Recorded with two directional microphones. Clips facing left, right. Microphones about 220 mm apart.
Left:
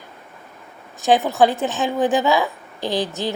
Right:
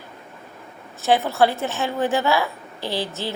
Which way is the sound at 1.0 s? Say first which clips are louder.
Left 2 dB; 15° left (ahead or behind).